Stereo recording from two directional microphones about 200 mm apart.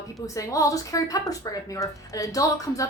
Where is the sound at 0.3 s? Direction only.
15° left (ahead or behind).